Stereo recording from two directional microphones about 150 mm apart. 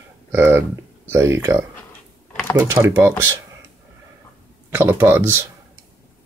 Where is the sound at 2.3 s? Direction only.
10° left (ahead or behind).